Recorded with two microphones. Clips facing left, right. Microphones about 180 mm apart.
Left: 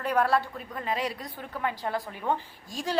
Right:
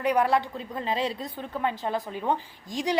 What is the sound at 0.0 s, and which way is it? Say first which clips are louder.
A woman's voice: right 2 dB; 15° right (ahead or behind).